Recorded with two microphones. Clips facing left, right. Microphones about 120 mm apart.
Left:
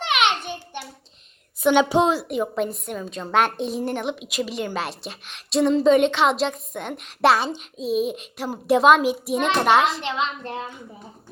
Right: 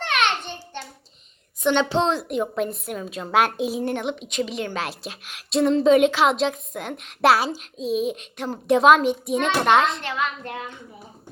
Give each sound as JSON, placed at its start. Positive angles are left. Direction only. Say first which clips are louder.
{"t": 0.0, "sound": "a sound", "louder": "left 1 dB", "side_deg": 15}
{"t": 1.6, "sound": "a woman's voice", "louder": "left 3 dB", "side_deg": 10}
{"t": 10.0, "sound": "a woman's voice", "louder": "left 1 dB", "side_deg": 20}